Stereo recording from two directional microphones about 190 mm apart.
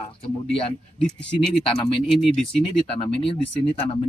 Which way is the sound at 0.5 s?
30° left (ahead or behind).